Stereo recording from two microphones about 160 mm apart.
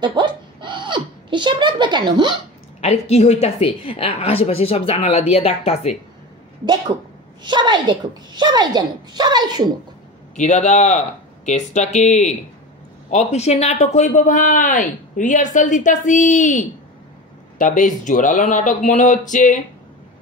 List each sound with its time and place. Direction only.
0.0 s giggle: 30° right (ahead or behind)
2.8 s a woman's voice: 40° left (ahead or behind)
6.6 s a woman's voice: 30° right (ahead or behind)
10.3 s speech: 50° left (ahead or behind)